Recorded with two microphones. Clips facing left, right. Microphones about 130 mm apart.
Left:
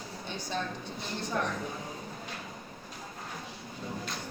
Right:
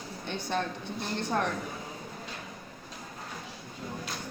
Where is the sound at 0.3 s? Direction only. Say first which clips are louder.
Right 4 dB; 60° right (ahead or behind).